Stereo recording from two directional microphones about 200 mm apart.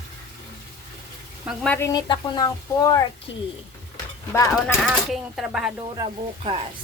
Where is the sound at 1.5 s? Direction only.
5° left (ahead or behind).